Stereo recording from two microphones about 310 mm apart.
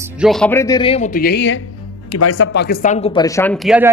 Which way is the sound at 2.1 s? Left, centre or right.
Left.